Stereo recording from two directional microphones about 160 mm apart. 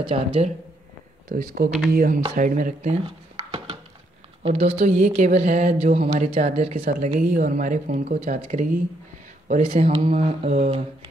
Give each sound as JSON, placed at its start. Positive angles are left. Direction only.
{"t": 0.1, "sound": "speech", "side_deg": -35}
{"t": 1.3, "sound": "speech", "side_deg": -60}
{"t": 4.4, "sound": "speech", "side_deg": -40}